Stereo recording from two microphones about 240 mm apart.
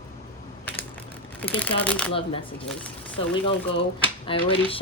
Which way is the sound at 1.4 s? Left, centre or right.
Centre.